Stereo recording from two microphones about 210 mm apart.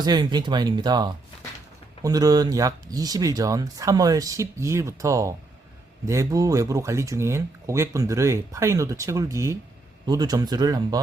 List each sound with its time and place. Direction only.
0.0 s speech: 20° right (ahead or behind)